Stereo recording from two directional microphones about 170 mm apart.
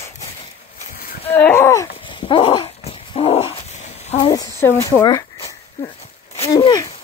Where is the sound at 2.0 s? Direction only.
30° left (ahead or behind).